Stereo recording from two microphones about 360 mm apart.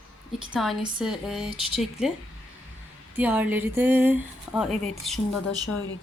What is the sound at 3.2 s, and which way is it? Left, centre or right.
Speech, centre.